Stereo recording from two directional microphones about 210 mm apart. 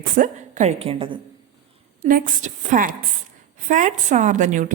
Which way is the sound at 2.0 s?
40° right (ahead or behind).